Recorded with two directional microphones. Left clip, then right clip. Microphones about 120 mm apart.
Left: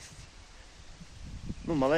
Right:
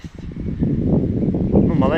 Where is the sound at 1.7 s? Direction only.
30° left (ahead or behind).